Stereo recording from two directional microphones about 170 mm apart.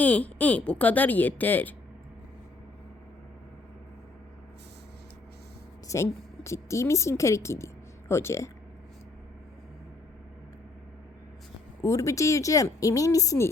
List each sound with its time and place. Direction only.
0.0 s speech: 10° left (ahead or behind)
5.9 s a woman's voice: 15° left (ahead or behind)
11.8 s speech: 20° left (ahead or behind)